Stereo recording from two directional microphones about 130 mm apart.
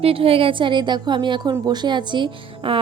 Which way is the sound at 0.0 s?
45° right (ahead or behind).